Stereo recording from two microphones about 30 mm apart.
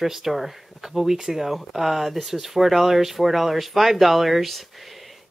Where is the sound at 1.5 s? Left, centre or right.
Centre.